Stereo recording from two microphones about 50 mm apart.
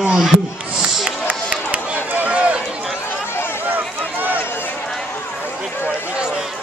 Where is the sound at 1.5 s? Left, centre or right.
Right.